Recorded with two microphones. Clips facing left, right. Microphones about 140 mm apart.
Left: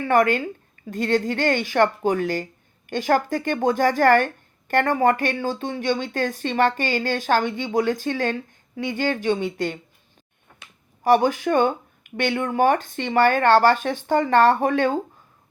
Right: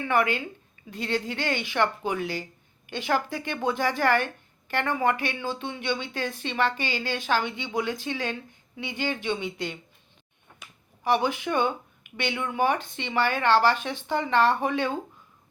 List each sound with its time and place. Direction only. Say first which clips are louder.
0.0 s speech: left 6 dB; 45° left (ahead or behind)
11.0 s speech: left 7 dB; 45° left (ahead or behind)